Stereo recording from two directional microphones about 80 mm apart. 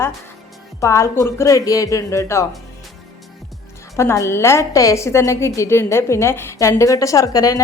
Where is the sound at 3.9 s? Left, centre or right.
Left.